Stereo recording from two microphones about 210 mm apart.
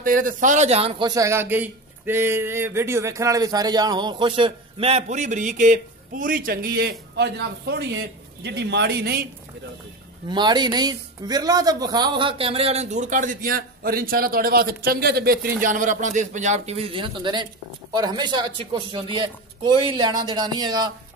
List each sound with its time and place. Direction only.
0.0 s a man's voice: 40° right (ahead or behind)
10.2 s a man's voice: 20° right (ahead or behind)